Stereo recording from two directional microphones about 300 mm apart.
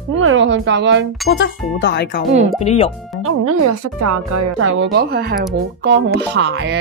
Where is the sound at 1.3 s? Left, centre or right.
Left.